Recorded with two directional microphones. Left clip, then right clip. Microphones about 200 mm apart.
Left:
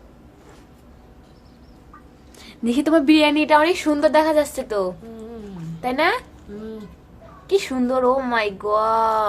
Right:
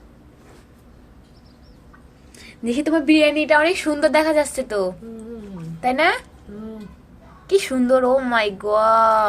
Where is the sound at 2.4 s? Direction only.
20° left (ahead or behind); by 6.2 s 5° right (ahead or behind).